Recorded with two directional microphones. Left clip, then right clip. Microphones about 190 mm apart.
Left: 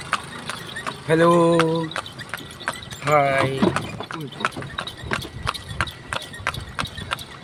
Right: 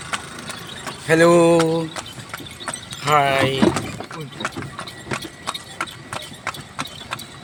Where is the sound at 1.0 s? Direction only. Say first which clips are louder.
Right 3 dB; 10° left (ahead or behind).